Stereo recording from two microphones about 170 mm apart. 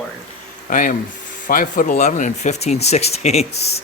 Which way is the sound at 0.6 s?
55° left (ahead or behind).